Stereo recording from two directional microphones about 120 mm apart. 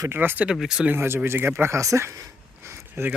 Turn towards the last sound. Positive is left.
turn(degrees=-20)  # may be behind; listen again after turning